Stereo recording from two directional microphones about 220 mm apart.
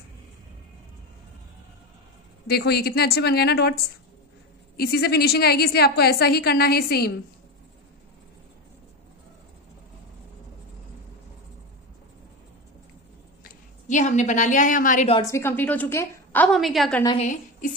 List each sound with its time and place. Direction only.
2.4 s a woman's voice: 45° left (ahead or behind)
13.4 s a woman's voice: 35° left (ahead or behind)
15.1 s a woman's voice: 15° left (ahead or behind)
17.2 s a woman's voice: 35° left (ahead or behind)